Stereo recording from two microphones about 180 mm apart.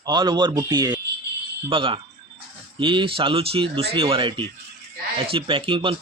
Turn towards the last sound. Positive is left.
turn(degrees=-30)  # may be behind; listen again after turning